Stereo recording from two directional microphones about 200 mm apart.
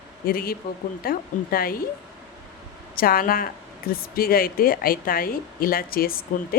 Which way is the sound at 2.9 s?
45° left (ahead or behind).